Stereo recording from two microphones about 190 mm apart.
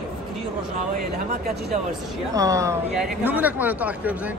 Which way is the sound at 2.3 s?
15° right (ahead or behind).